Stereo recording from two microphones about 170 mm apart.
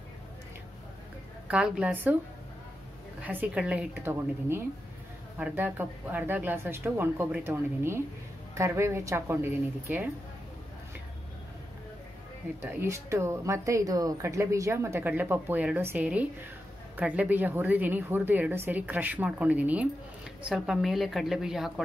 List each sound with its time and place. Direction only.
1.5 s speech: 5° right (ahead or behind)
3.2 s speech: 10° right (ahead or behind)
12.6 s a woman's voice: 15° right (ahead or behind)